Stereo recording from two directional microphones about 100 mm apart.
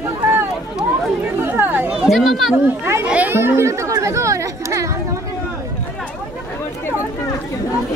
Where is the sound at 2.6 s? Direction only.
20° right (ahead or behind).